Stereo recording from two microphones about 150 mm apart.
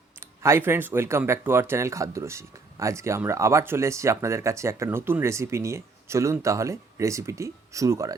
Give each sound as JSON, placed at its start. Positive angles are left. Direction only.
{"t": 0.2, "sound": "speech", "side_deg": -15}